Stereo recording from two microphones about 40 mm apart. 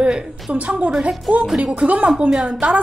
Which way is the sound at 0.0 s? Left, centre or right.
Right.